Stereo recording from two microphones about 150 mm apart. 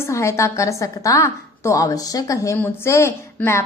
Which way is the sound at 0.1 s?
20° left (ahead or behind).